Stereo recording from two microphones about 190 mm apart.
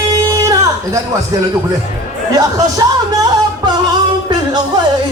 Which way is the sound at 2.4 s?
20° right (ahead or behind).